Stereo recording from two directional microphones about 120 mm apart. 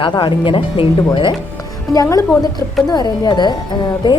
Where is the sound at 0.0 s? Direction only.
45° left (ahead or behind).